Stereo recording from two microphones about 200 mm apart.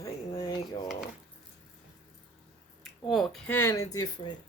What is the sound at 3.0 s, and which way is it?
Speech, centre (ahead or behind).